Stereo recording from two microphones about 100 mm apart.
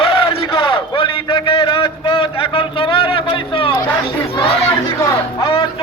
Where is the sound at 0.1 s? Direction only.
65° left (ahead or behind).